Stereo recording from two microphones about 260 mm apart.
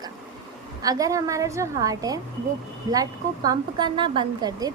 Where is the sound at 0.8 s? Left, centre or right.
Centre.